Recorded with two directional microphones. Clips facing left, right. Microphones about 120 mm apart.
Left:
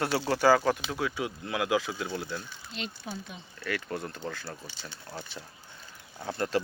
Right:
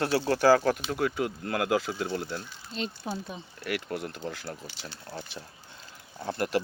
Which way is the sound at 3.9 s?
70° right (ahead or behind).